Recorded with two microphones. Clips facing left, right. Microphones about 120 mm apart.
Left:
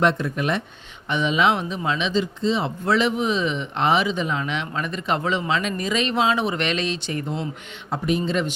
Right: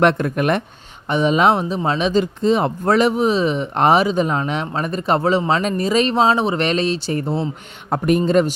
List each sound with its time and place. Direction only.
0.0 s speech: 60° right (ahead or behind)
1.0 s speech: 40° right (ahead or behind)
7.9 s speech: 55° right (ahead or behind)
8.2 s speech: 45° right (ahead or behind)